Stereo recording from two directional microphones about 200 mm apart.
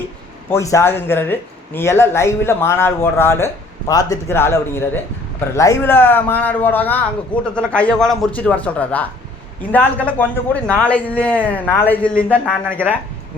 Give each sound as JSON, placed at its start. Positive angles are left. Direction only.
{"t": 0.5, "sound": "speech", "side_deg": 15}